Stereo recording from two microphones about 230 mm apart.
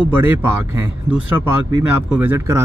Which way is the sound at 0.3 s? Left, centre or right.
Centre.